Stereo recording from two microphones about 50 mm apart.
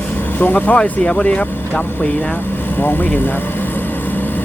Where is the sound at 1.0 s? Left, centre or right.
Left.